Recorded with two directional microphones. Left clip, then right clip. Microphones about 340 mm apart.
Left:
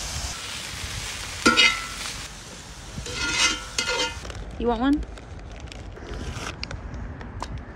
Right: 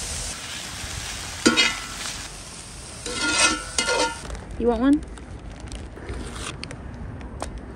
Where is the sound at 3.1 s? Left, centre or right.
Centre.